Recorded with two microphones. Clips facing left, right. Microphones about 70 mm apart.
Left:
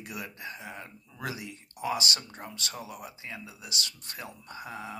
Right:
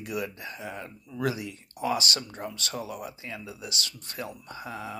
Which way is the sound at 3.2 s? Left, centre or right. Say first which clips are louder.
Right 4 dB; left.